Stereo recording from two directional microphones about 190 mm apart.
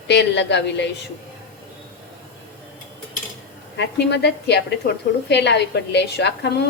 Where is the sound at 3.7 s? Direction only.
65° left (ahead or behind).